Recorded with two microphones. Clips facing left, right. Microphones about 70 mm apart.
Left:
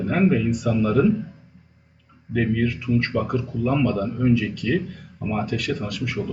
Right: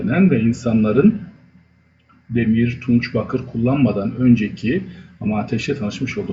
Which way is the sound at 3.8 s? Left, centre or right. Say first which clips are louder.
Right 5 dB; right.